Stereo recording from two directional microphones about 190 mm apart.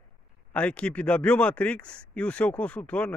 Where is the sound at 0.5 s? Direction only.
5° left (ahead or behind).